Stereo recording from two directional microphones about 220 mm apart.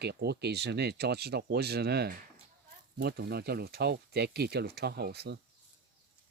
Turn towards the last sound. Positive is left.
turn(degrees=-45)  # may be behind; listen again after turning